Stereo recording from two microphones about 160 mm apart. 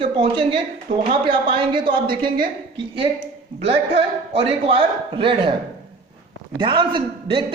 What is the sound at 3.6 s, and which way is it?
A man's voice, 40° right (ahead or behind).